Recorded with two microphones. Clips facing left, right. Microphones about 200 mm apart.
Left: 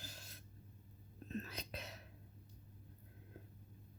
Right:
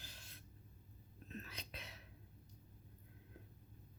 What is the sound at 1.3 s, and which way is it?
Whispering, 40° left (ahead or behind).